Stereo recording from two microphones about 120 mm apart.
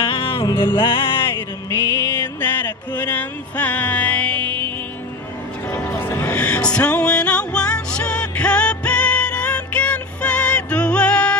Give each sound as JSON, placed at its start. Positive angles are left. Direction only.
{"t": 0.0, "sound": "music", "side_deg": 50}
{"t": 1.2, "sound": "music", "side_deg": 20}